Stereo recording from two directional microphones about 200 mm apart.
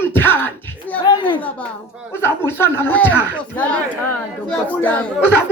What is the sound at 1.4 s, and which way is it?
Speech, 5° left (ahead or behind).